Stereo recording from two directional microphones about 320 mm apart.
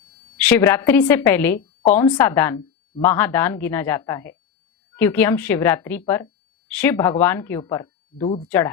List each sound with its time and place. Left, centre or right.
0.3 s a woman's voice: centre